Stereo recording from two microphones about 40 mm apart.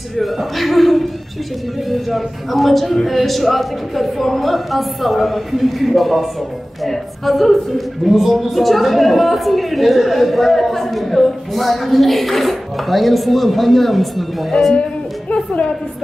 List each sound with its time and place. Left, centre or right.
0.2 s speech: centre
14.7 s music: left